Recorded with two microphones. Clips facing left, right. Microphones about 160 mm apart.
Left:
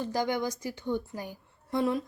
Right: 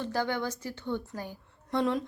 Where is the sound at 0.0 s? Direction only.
15° left (ahead or behind).